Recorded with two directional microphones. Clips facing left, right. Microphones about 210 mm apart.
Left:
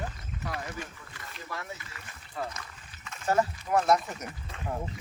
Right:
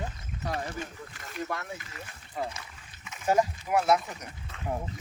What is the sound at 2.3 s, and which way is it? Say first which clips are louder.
Speech: right 1 dB; 15° right (ahead or behind).